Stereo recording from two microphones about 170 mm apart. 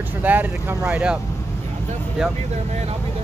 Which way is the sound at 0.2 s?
10° right (ahead or behind).